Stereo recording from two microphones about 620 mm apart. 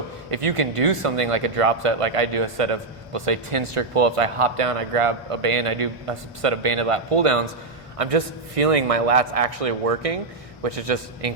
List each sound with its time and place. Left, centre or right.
0.3 s speech: right